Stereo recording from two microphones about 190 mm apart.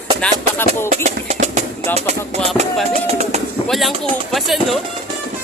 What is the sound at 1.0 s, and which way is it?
Music, 35° right (ahead or behind).